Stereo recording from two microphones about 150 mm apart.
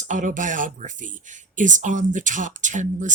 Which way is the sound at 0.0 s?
60° right (ahead or behind).